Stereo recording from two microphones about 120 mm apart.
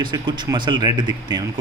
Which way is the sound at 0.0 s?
40° right (ahead or behind).